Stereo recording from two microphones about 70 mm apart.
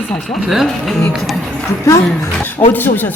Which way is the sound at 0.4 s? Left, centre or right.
Centre.